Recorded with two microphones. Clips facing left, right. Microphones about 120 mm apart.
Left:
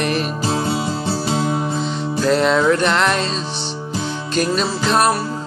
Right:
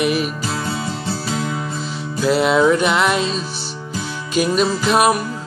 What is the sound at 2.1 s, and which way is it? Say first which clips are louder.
Music: right 1 dB; 10° right (ahead or behind).